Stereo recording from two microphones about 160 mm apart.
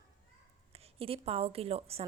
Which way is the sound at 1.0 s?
35° right (ahead or behind).